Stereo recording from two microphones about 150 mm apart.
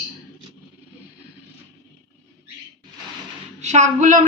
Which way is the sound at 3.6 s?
50° right (ahead or behind).